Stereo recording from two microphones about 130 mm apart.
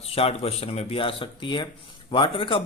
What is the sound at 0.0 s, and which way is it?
A man's voice, 50° left (ahead or behind).